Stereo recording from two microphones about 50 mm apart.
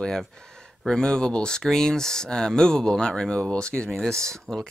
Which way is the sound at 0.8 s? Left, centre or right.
Centre.